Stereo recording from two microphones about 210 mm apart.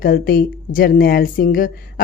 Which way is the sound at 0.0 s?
45° left (ahead or behind).